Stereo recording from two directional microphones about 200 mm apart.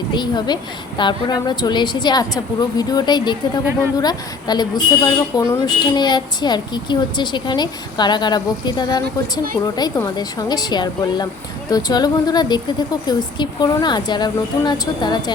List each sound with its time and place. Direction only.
0.1 s a woman's voice: 20° left (ahead or behind)